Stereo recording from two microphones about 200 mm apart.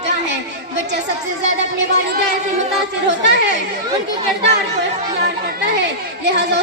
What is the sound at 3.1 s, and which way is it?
Speech, 60° right (ahead or behind).